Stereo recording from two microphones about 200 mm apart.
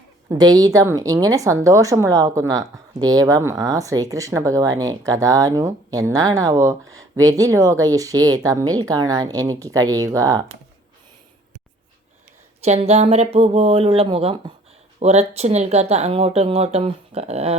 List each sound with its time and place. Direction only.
0.3 s a woman's voice: 20° right (ahead or behind)
12.6 s speech: 35° right (ahead or behind)